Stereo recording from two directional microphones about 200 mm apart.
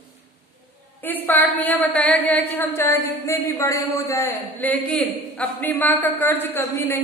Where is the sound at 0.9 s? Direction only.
10° left (ahead or behind).